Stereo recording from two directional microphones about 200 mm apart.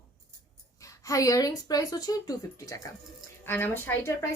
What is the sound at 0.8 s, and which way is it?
A woman's voice, 15° left (ahead or behind).